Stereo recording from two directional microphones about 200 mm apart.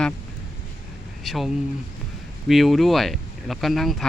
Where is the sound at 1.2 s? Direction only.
Centre (ahead or behind).